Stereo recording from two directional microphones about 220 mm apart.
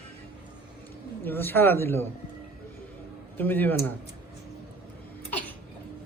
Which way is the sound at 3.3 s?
10° left (ahead or behind).